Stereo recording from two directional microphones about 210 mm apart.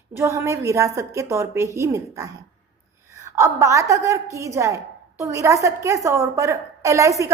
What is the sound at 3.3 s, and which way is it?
A woman's voice, 15° right (ahead or behind).